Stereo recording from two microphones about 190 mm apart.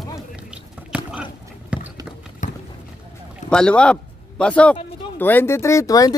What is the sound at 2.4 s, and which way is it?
Boat, 40° left (ahead or behind).